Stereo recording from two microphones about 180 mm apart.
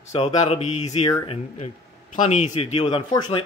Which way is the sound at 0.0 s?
35° left (ahead or behind).